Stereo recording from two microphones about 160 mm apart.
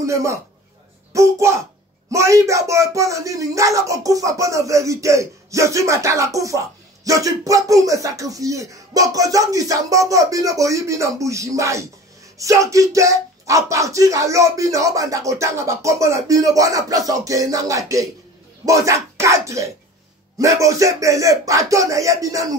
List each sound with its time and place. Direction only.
0.0 s speech: 20° right (ahead or behind)